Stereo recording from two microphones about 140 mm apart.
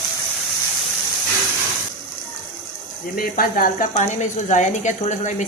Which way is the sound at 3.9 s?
60° left (ahead or behind).